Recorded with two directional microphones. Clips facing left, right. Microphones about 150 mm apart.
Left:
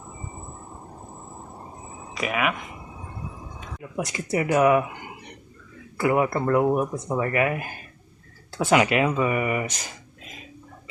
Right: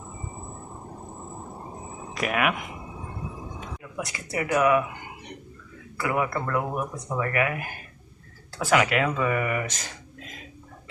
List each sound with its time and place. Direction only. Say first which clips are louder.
2.1 s speech: even; centre (ahead or behind)
3.9 s speech: left 5 dB; 25° left (ahead or behind)
6.0 s speech: left 5 dB; 30° left (ahead or behind); by 9.8 s 15° left (ahead or behind)